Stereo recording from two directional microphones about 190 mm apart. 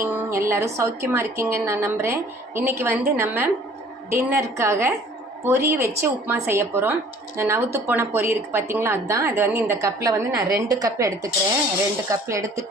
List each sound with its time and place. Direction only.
0.0 s a woman's voice: 10° right (ahead or behind)